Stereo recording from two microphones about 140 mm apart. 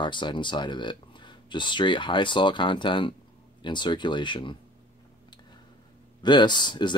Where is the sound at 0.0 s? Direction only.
35° left (ahead or behind).